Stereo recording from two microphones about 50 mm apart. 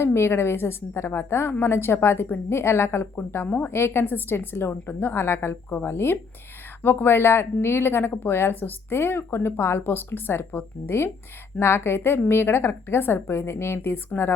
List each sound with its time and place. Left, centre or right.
0.0 s a woman's voice: left
3.2 s speech: left
3.7 s a woman's voice: left
4.0 s speech: left